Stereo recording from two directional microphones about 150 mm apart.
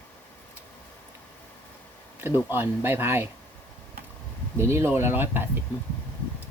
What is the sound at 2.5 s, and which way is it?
Speech, 15° right (ahead or behind).